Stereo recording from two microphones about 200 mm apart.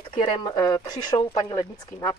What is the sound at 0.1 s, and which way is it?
Speech, 20° left (ahead or behind).